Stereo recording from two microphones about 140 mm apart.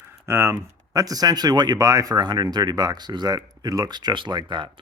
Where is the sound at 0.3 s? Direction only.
20° right (ahead or behind).